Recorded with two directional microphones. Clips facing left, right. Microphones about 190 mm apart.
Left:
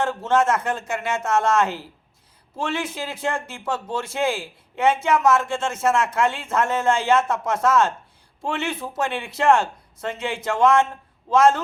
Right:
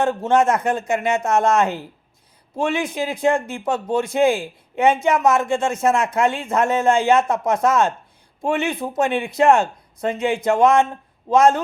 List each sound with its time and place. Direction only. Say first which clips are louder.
0.0 s a man's voice: right 3 dB; 15° right (ahead or behind)